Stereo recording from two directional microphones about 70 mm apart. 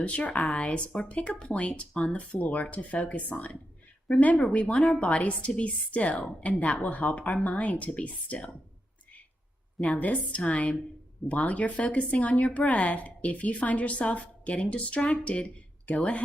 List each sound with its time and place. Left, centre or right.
0.0 s a woman's voice: centre
9.8 s a woman's voice: centre